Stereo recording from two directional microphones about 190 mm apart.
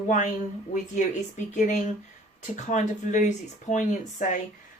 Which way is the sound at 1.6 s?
40° left (ahead or behind).